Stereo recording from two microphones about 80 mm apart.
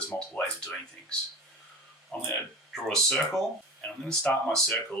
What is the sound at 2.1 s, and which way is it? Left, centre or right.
Speech, centre.